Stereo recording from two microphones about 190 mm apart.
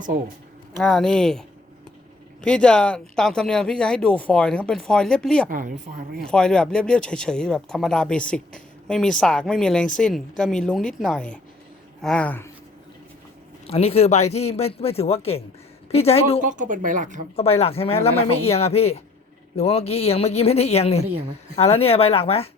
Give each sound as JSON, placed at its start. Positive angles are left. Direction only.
{"t": 0.8, "sound": "speech", "side_deg": 0}
{"t": 5.5, "sound": "speech", "side_deg": -45}
{"t": 6.2, "sound": "speech", "side_deg": 5}
{"t": 13.7, "sound": "speech", "side_deg": 35}
{"t": 16.5, "sound": "speech", "side_deg": -40}
{"t": 17.3, "sound": "speech", "side_deg": 30}